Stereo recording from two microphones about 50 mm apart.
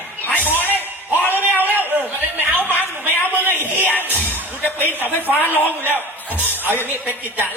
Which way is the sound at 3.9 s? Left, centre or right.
Left.